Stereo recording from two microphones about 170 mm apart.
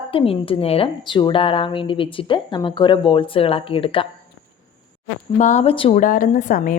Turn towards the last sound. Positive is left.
turn(degrees=50)  # may be behind; listen again after turning